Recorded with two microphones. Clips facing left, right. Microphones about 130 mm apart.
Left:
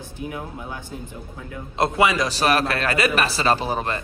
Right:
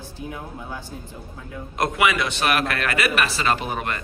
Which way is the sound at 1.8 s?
35° left (ahead or behind).